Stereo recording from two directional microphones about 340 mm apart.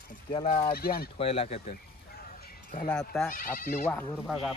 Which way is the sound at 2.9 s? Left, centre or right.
Centre.